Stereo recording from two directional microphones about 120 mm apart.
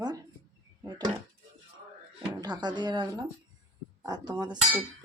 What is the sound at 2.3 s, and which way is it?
Speech, 35° right (ahead or behind).